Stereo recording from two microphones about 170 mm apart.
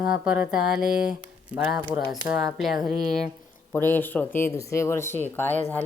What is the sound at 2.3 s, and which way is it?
Speech, 20° right (ahead or behind).